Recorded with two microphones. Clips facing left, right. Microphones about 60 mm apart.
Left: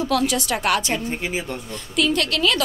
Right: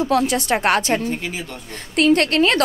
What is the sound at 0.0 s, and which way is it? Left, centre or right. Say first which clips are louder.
A woman's voice: right 3 dB; right.